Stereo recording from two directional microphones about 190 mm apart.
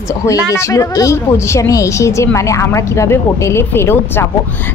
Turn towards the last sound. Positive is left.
turn(degrees=10)  # may be behind; listen again after turning